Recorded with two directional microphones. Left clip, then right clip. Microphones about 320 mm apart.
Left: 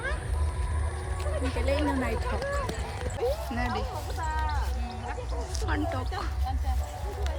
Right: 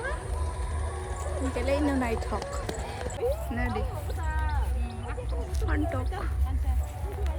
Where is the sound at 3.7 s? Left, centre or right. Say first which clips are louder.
Left 2 dB; left.